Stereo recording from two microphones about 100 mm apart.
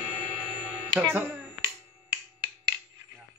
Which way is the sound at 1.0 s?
20° right (ahead or behind).